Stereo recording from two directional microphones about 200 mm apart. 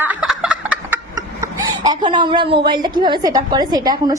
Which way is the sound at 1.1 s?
15° right (ahead or behind).